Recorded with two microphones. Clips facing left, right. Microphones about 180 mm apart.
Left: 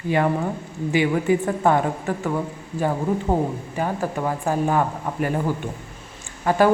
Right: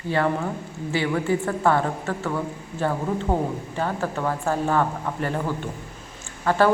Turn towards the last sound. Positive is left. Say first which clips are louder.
# left 1 dB
turn(degrees=15)  # may be behind; listen again after turning